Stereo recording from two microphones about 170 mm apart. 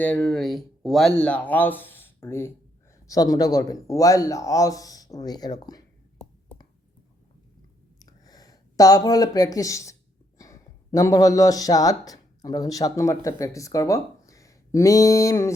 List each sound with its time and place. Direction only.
0.0 s speech: 5° left (ahead or behind); by 5.8 s 25° left (ahead or behind)
7.9 s a sound: 20° left (ahead or behind)
10.3 s speech: 20° left (ahead or behind)